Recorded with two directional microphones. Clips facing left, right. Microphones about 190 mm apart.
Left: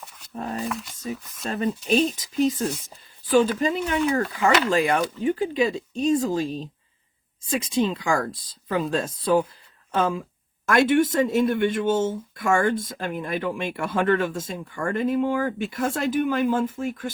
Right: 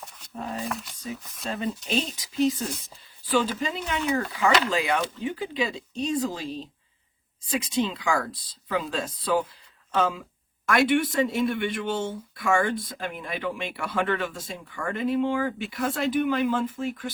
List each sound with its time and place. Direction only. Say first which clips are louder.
0.7 s speech: left 3 dB; centre (ahead or behind)
1.5 s speech: left 6 dB; 50° left (ahead or behind)